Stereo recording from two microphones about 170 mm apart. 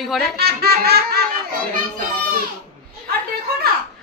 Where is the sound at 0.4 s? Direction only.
65° right (ahead or behind).